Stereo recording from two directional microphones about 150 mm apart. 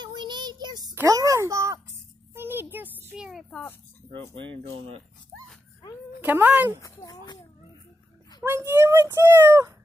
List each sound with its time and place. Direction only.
0.0 s child singing: 30° right (ahead or behind)
0.9 s a child's voice: 20° right (ahead or behind)
2.3 s a sound: 15° right (ahead or behind); by 3.6 s centre (ahead or behind)
4.4 s speech: 35° right (ahead or behind)
6.2 s speech: 10° right (ahead or behind)
6.8 s a child's voice: 25° left (ahead or behind)
8.4 s speech: 20° right (ahead or behind)